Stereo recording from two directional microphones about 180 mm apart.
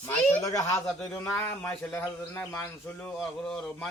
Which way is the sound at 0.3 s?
15° left (ahead or behind).